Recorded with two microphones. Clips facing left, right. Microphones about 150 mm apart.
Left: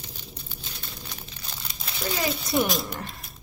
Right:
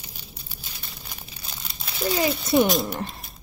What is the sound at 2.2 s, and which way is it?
Speech, centre (ahead or behind).